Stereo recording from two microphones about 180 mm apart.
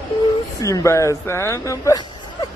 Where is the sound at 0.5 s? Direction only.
20° left (ahead or behind).